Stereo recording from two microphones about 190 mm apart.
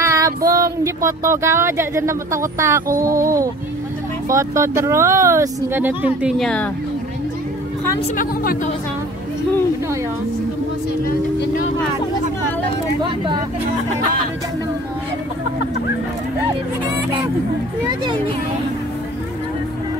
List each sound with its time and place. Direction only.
0.0 s female singing: 15° right (ahead or behind)
0.5 s speech: 20° right (ahead or behind); by 6.7 s 5° left (ahead or behind)